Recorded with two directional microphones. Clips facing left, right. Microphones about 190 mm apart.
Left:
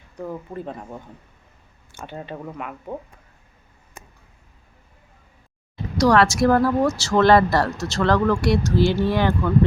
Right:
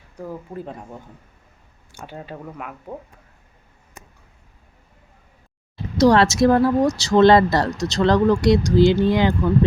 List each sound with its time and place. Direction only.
0.5 s speech: 5° right (ahead or behind)
1.9 s a sound: 10° right (ahead or behind)
2.1 s speech: centre (ahead or behind)
5.7 s speech: 25° right (ahead or behind)